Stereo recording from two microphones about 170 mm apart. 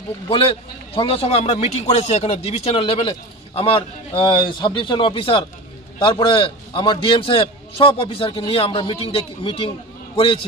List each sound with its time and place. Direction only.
0.3 s a man's voice: 30° left (ahead or behind)